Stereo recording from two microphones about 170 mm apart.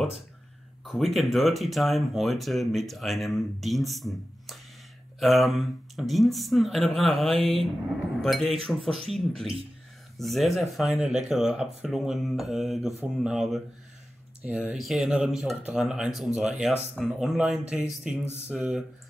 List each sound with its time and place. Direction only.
0.8 s speech: centre (ahead or behind)
14.7 s speech: centre (ahead or behind)